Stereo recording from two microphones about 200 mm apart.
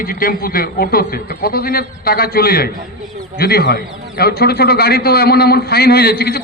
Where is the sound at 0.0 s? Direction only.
45° left (ahead or behind).